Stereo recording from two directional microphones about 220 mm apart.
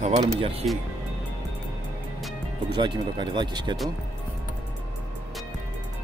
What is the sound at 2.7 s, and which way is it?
Speech, 20° right (ahead or behind).